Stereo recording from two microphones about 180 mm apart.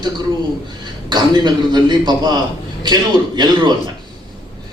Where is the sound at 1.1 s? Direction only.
25° right (ahead or behind).